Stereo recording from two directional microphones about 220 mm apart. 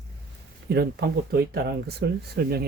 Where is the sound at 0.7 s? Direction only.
45° right (ahead or behind).